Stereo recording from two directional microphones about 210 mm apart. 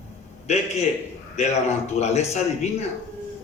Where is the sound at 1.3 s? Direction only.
30° left (ahead or behind).